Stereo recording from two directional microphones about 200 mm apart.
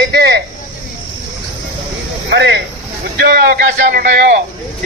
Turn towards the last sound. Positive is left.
turn(degrees=-50)  # may be behind; listen again after turning